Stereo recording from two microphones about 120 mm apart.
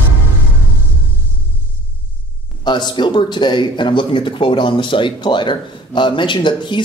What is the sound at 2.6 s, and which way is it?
Speech, 40° left (ahead or behind).